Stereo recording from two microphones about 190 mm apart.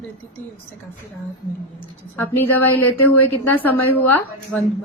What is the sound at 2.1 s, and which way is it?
A woman's voice, 10° left (ahead or behind).